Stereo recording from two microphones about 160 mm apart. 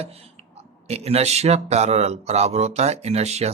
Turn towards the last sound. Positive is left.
turn(degrees=-40)  # may be behind; listen again after turning